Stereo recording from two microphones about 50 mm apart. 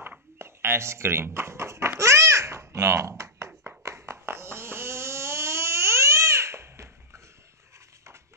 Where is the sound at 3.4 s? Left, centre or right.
Right.